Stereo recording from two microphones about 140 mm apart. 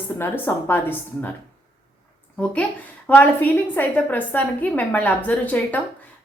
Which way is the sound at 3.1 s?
15° left (ahead or behind).